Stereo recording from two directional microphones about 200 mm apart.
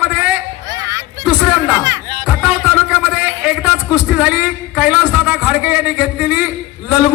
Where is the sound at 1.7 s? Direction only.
15° right (ahead or behind).